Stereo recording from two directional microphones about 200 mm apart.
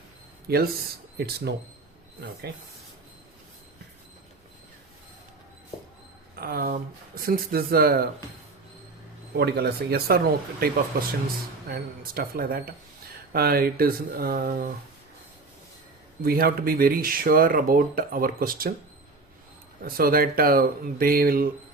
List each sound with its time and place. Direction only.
0.4 s speech: 50° right (ahead or behind)
6.4 s speech: 50° right (ahead or behind)
9.3 s speech: 55° right (ahead or behind)
16.2 s speech: 50° right (ahead or behind)
19.8 s speech: 45° right (ahead or behind)